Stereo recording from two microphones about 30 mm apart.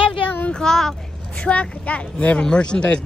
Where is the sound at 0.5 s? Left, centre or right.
Centre.